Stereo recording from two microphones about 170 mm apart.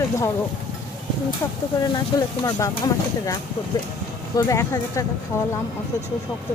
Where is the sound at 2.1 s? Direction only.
20° left (ahead or behind).